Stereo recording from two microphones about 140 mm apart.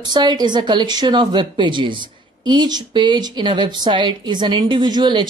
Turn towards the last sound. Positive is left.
turn(degrees=-30)  # may be behind; listen again after turning